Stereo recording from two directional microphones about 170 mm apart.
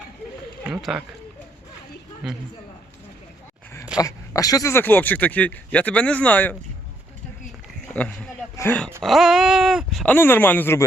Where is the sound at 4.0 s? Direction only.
20° left (ahead or behind).